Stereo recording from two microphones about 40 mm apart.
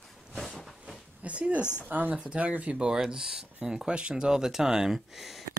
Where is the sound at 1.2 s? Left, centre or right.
Right.